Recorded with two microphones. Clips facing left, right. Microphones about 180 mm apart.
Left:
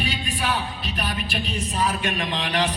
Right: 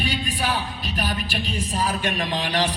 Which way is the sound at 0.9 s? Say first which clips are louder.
Right 2 dB; 35° right (ahead or behind).